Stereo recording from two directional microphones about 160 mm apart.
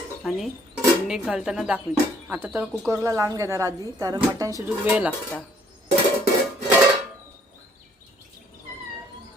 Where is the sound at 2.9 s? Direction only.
20° right (ahead or behind).